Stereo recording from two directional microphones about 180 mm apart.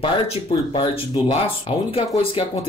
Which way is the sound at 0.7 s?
25° left (ahead or behind).